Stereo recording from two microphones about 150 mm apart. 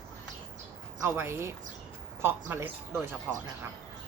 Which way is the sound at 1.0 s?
15° right (ahead or behind).